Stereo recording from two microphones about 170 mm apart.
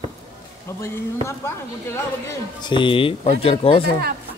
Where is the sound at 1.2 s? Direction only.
15° left (ahead or behind).